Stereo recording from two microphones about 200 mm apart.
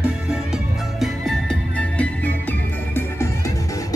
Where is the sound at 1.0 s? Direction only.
Centre (ahead or behind).